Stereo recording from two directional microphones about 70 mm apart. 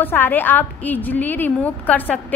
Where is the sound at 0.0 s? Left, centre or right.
Left.